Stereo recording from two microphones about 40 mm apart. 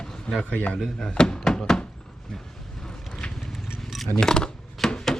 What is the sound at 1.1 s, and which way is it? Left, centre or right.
Thunk, left.